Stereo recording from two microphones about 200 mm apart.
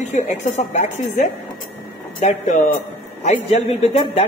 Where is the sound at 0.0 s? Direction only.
35° left (ahead or behind).